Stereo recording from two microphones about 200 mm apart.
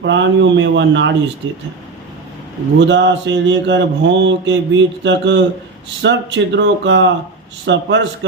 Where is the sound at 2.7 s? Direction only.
60° right (ahead or behind).